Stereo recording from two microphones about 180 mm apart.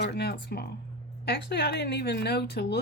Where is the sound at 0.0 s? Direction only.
65° left (ahead or behind).